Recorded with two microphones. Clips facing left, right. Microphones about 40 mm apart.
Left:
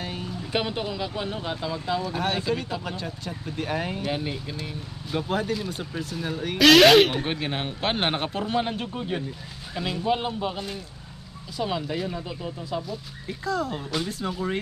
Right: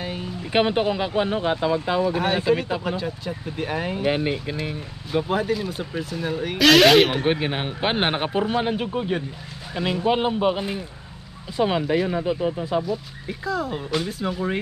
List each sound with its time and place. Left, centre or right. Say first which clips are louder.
0.5 s speech: right 8 dB; right
2.1 s speech: right 5 dB; centre
4.0 s speech: right 6 dB; right
5.1 s speech: right 4 dB; centre
7.1 s speech: right 5 dB; centre
12.8 s speech: right 6 dB; centre